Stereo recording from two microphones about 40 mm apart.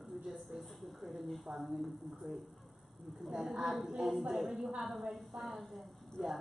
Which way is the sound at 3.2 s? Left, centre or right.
Centre.